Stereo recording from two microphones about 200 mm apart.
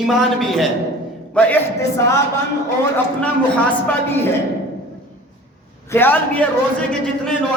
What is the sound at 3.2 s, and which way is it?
Speech, 5° left (ahead or behind).